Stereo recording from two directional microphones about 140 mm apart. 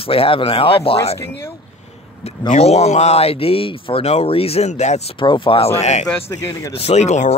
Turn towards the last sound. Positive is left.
turn(degrees=55)  # may be behind; listen again after turning